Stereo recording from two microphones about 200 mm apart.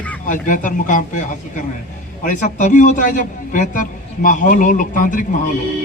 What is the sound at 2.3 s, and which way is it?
A man's voice, 40° left (ahead or behind).